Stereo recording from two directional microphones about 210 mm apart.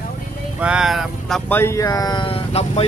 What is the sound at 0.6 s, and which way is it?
Speech, 5° right (ahead or behind).